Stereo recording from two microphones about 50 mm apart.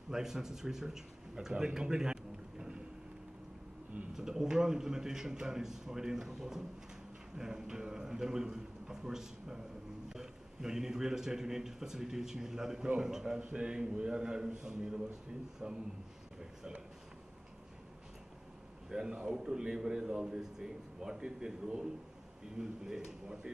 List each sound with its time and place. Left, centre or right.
0.1 s a man's voice: centre
4.1 s a man's voice: centre
18.9 s a man's voice: centre